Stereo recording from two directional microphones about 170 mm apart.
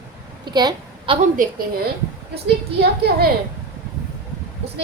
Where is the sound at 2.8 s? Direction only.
70° right (ahead or behind).